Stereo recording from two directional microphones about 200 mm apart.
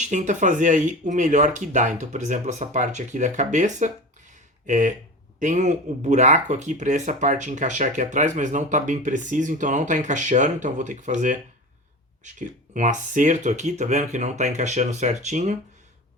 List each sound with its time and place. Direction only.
0.0 s speech: 35° right (ahead or behind)